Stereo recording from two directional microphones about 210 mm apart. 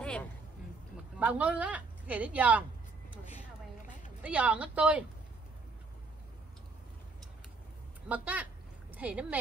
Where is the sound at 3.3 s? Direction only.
35° left (ahead or behind).